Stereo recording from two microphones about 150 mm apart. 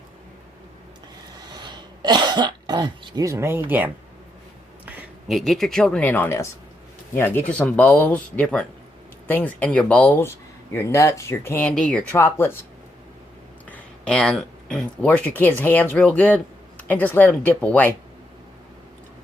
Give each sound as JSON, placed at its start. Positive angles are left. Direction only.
{"t": 1.4, "sound": "cough", "side_deg": -30}
{"t": 3.2, "sound": "speech", "side_deg": -15}
{"t": 4.9, "sound": "a sound", "side_deg": -10}
{"t": 5.4, "sound": "speech", "side_deg": 0}
{"t": 12.1, "sound": "speech", "side_deg": 15}
{"t": 13.7, "sound": "speech", "side_deg": 5}